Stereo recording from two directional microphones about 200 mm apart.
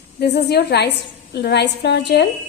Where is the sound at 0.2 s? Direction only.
55° left (ahead or behind).